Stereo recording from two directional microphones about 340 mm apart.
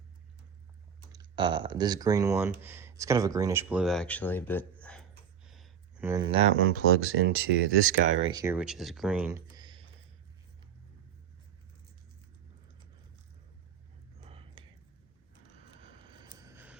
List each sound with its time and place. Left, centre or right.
1.1 s speech: centre
5.5 s a sound: centre
6.7 s speech: right
8.2 s speech: centre
14.3 s whispering: centre
15.7 s a sound: centre